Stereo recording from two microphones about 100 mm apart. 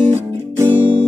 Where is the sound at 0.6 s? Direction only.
20° right (ahead or behind).